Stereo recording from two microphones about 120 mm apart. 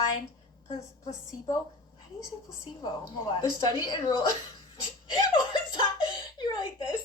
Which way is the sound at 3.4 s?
35° left (ahead or behind).